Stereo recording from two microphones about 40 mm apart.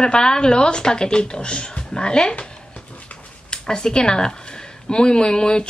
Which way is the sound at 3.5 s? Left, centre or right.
Centre.